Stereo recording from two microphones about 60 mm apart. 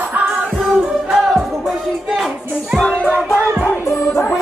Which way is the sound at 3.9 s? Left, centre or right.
Left.